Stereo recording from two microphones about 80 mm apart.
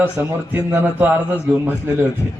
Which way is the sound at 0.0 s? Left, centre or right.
Right.